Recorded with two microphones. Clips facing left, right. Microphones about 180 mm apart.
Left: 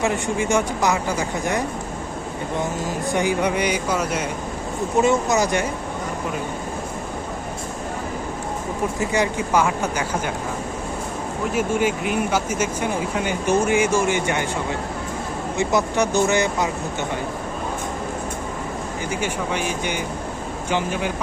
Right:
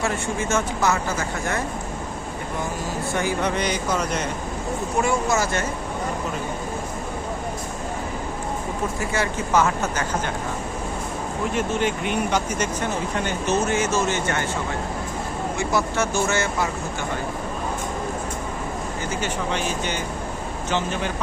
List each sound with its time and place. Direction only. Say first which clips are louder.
0.0 s speech: left 3 dB; 15° left (ahead or behind)
3.1 s speech: left 3 dB; 15° left (ahead or behind)
4.9 s speech: left 4 dB; 20° left (ahead or behind)
9.0 s speech: left 3 dB; 15° left (ahead or behind)
11.5 s speech: left 3 dB; 10° left (ahead or behind)
15.5 s speech: left 4 dB; 20° left (ahead or behind)
19.2 s speech: left 1 dB; 10° left (ahead or behind)